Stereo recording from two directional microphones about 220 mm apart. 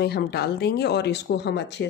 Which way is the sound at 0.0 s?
45° left (ahead or behind).